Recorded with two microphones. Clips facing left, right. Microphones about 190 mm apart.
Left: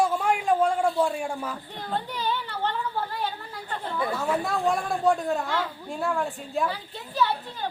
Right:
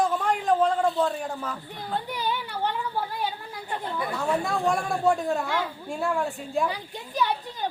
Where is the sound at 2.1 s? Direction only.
10° right (ahead or behind).